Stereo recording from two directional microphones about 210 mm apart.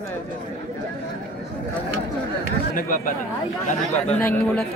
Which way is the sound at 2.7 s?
40° left (ahead or behind).